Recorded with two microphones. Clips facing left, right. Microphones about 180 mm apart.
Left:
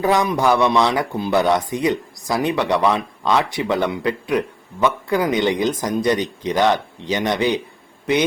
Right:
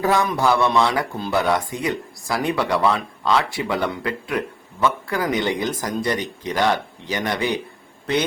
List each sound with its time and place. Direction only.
0.0 s speech: 15° left (ahead or behind)